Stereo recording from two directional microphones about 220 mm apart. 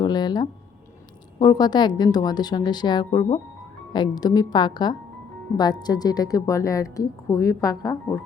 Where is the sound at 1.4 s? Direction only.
20° left (ahead or behind).